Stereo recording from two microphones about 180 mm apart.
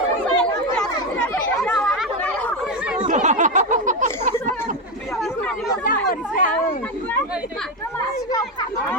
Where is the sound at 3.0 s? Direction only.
40° right (ahead or behind).